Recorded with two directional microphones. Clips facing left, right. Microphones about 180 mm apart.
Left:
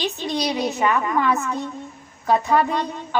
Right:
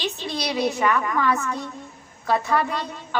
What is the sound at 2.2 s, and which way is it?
Speech, 20° left (ahead or behind).